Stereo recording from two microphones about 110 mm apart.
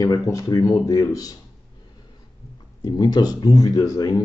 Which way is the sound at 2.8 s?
40° left (ahead or behind).